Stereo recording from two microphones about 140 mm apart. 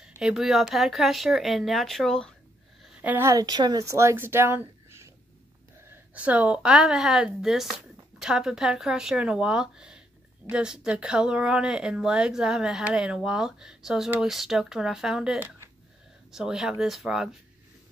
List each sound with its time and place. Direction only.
0.2 s a woman's voice: centre (ahead or behind)
2.8 s a woman's voice: 10° right (ahead or behind)
5.9 s a woman's voice: 10° right (ahead or behind)